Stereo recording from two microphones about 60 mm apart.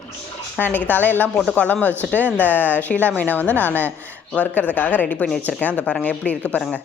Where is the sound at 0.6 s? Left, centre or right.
Left.